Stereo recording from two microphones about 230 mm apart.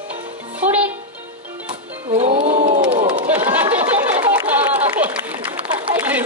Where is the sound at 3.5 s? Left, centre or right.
Centre.